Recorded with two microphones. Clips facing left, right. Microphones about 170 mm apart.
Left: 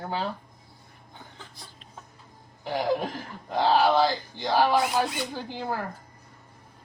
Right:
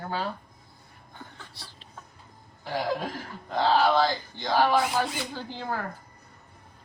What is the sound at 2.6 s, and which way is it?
A woman's voice, 15° left (ahead or behind).